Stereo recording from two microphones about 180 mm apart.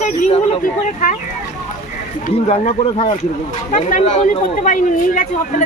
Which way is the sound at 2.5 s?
40° left (ahead or behind).